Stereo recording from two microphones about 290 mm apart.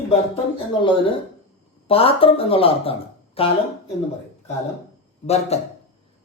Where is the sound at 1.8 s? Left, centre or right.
Centre.